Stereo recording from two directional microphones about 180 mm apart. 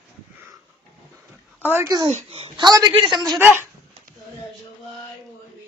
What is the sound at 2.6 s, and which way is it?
Speech, 25° right (ahead or behind).